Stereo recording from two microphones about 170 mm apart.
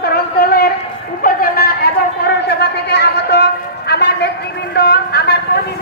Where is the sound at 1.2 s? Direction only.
55° left (ahead or behind).